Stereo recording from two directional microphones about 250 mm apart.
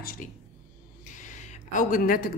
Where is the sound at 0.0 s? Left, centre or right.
Left.